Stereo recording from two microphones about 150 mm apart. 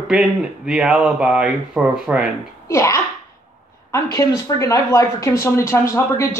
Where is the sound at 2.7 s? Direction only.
20° left (ahead or behind).